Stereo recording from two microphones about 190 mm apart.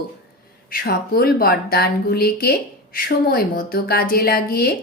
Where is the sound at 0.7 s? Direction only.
55° left (ahead or behind).